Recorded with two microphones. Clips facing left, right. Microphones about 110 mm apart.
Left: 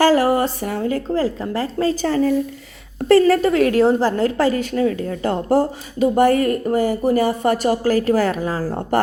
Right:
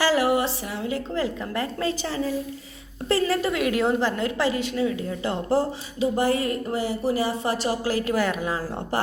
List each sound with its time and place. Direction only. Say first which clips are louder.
0.0 s a woman's voice: left 6 dB; 45° left (ahead or behind); by 3.3 s 60° left (ahead or behind)
3.4 s a woman's voice: left 8 dB; 40° left (ahead or behind)